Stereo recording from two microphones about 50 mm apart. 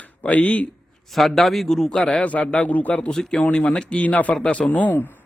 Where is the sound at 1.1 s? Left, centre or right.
Centre.